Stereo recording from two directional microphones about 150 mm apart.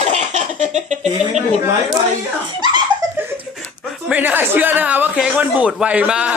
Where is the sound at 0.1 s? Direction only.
55° right (ahead or behind).